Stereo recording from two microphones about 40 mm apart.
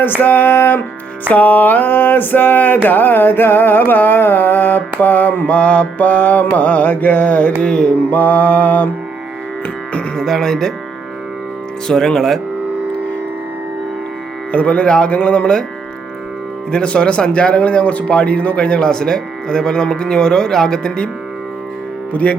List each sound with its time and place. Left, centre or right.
0.2 s a sound: left
5.5 s a sound: left
7.6 s speech: left
8.1 s speech: left
10.2 s speech: centre
11.9 s speech: centre
14.5 s speech: left
16.7 s speech: left
22.1 s speech: left